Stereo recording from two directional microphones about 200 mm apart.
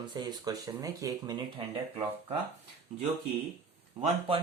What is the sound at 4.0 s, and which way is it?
Speech, 30° right (ahead or behind).